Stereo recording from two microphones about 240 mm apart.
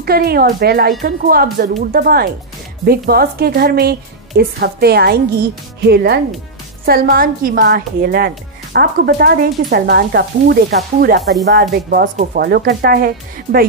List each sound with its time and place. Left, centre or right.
0.0 s speech: right